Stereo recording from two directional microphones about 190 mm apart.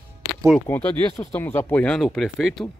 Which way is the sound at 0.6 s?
10° left (ahead or behind).